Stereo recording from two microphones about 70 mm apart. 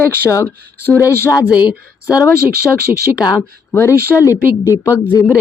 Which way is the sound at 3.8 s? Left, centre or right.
Left.